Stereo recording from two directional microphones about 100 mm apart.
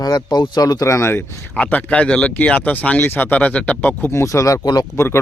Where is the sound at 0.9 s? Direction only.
25° left (ahead or behind).